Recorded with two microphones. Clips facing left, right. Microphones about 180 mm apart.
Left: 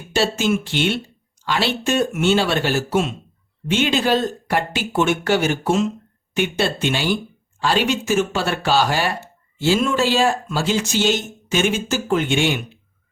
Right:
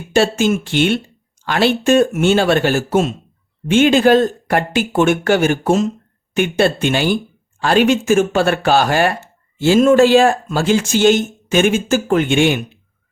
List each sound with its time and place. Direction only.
0.1 s speech: 50° right (ahead or behind)